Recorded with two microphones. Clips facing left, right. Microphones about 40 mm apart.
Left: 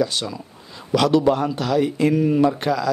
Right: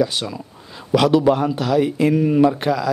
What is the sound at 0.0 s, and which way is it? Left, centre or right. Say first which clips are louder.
A man's voice: right 2 dB; centre.